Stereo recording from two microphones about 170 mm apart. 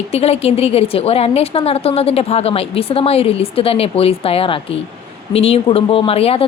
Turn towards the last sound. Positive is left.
turn(degrees=35)  # may be behind; listen again after turning